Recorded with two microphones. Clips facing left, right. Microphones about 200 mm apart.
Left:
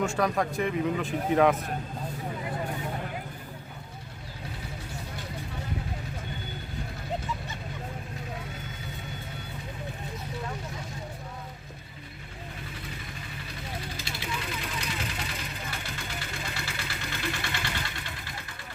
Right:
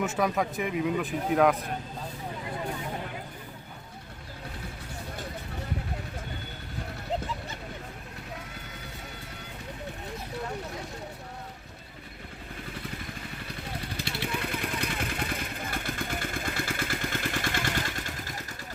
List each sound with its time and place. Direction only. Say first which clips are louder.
0.0 s speech: left 1 dB; 5° right (ahead or behind)
13.9 s vehicle: right 3 dB; 60° right (ahead or behind); by 18.4 s 45° right (ahead or behind)